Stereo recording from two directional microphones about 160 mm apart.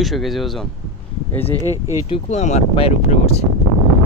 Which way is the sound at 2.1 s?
45° left (ahead or behind).